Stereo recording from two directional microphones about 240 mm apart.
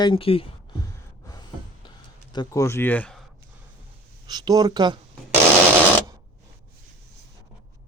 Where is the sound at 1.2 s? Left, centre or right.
Centre.